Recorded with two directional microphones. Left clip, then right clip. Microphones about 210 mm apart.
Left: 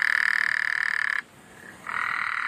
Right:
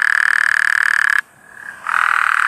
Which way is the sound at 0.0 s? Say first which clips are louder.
Right 9 dB; 50° right (ahead or behind).